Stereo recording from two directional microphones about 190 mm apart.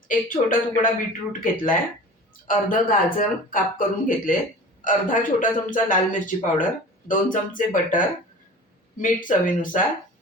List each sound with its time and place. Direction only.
0.1 s a man's voice: 45° left (ahead or behind)
2.5 s a man's voice: 45° left (ahead or behind)